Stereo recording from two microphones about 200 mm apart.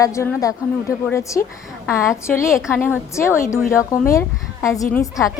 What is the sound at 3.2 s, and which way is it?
A woman's voice, 15° left (ahead or behind).